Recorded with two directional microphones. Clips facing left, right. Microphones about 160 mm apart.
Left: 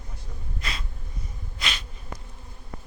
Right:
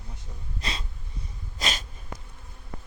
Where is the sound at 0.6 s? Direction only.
30° right (ahead or behind).